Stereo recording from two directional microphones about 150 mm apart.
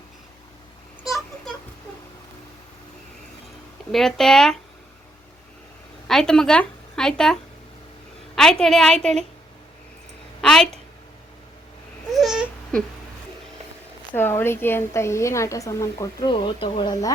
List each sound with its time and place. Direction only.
1.0 s a sound: centre (ahead or behind)
3.9 s a woman's voice: 5° left (ahead or behind)
6.1 s a woman's voice: 5° left (ahead or behind)
8.4 s a woman's voice: 5° left (ahead or behind)
10.4 s a woman's voice: 5° left (ahead or behind)
12.1 s baby cry: centre (ahead or behind)
14.1 s a woman's voice: 15° left (ahead or behind)
16.2 s speech: 35° left (ahead or behind)